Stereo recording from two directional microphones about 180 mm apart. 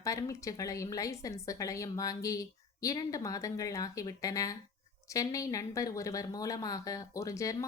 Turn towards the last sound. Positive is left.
turn(degrees=15)  # may be behind; listen again after turning